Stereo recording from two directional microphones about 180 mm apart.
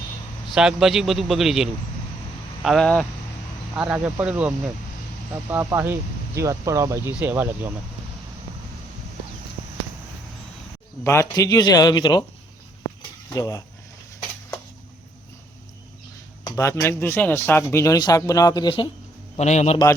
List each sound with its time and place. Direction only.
0.4 s a man's voice: 5° right (ahead or behind)
3.8 s speech: 5° right (ahead or behind)
11.0 s a man's voice: 15° left (ahead or behind)
13.0 s a sound: 20° left (ahead or behind)
16.6 s speech: 15° left (ahead or behind)
19.4 s a man's voice: 40° left (ahead or behind)